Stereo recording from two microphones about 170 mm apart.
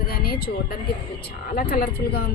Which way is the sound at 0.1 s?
65° left (ahead or behind).